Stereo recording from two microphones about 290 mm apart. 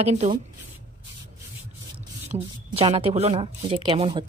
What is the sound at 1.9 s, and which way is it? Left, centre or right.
Speech, centre.